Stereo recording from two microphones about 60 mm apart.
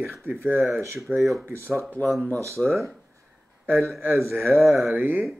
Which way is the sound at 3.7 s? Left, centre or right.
Right.